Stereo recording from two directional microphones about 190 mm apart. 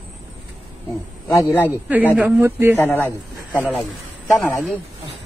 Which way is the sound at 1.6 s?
10° right (ahead or behind).